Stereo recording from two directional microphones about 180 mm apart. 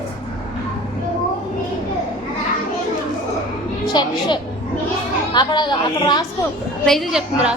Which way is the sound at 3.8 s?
25° left (ahead or behind).